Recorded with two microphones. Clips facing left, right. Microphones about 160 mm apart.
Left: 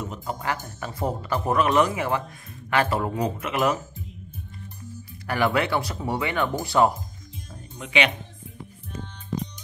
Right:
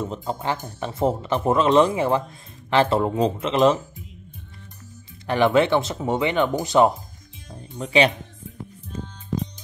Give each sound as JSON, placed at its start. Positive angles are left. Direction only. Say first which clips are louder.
{"t": 0.0, "sound": "speech", "louder": "right 4 dB", "side_deg": -25}
{"t": 5.2, "sound": "speech", "louder": "right 5 dB", "side_deg": -20}
{"t": 7.7, "sound": "speech", "louder": "right 5 dB", "side_deg": -35}